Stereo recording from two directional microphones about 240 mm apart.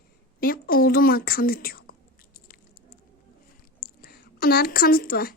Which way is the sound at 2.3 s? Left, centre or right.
Left.